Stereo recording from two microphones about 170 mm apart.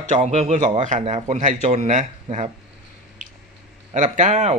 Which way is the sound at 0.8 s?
40° right (ahead or behind).